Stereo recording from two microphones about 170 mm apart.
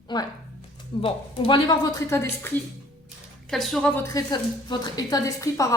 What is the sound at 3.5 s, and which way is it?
Speech, centre (ahead or behind).